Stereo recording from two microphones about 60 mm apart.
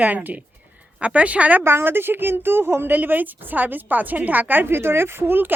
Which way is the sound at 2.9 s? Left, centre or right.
Right.